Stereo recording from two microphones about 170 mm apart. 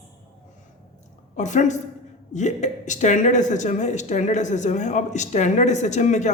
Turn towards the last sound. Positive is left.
turn(degrees=45)  # may be behind; listen again after turning